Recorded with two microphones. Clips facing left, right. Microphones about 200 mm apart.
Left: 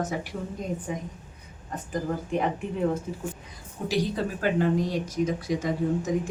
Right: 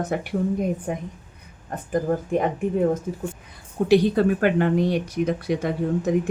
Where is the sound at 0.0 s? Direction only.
60° right (ahead or behind).